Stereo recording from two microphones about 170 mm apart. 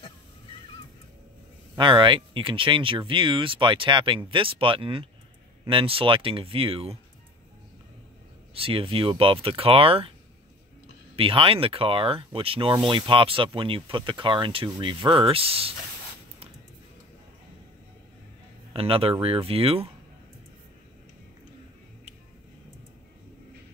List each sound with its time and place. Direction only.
1.8 s speech: 30° right (ahead or behind)
8.5 s speech: 30° right (ahead or behind)
11.1 s speech: 30° right (ahead or behind)
18.7 s speech: 35° right (ahead or behind)